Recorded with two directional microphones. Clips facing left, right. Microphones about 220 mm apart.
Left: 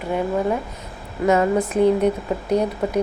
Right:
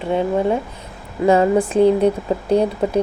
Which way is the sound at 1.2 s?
30° right (ahead or behind).